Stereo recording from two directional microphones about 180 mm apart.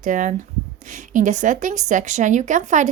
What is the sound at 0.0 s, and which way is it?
A woman's voice, 45° right (ahead or behind).